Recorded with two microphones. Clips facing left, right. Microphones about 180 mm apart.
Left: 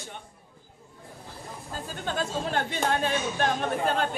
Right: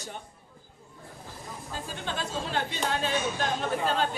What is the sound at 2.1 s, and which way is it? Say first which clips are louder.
Speech: left 4 dB; 50° left (ahead or behind).